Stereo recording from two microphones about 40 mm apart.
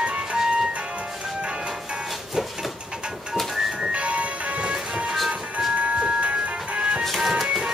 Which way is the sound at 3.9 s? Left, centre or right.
Right.